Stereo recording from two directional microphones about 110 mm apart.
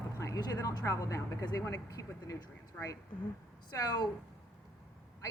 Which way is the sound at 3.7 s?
35° left (ahead or behind).